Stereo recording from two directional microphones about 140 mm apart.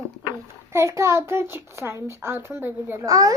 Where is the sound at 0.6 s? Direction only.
20° right (ahead or behind).